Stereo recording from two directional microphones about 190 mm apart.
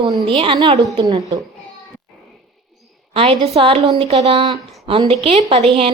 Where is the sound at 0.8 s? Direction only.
20° right (ahead or behind).